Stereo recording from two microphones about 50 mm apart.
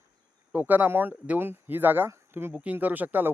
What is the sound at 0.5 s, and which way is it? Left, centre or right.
Speech, right.